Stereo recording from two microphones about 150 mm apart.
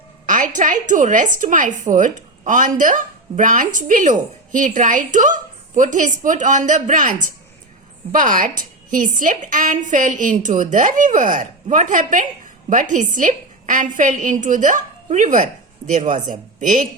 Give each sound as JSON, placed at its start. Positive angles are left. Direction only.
{"t": 0.3, "sound": "a woman's voice", "side_deg": -60}